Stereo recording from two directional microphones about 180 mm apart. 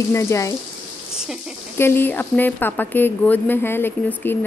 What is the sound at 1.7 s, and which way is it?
A woman's voice, 10° left (ahead or behind).